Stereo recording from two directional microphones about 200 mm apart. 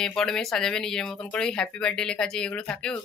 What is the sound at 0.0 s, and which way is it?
Speech, 5° left (ahead or behind).